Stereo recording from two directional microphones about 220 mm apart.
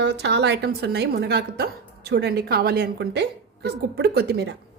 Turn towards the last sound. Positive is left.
turn(degrees=-50)  # may be behind; listen again after turning